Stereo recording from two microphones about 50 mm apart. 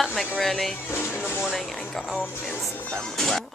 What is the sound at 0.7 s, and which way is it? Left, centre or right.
Speech, left.